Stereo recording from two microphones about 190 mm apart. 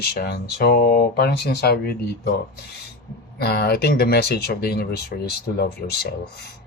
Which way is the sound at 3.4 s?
55° left (ahead or behind).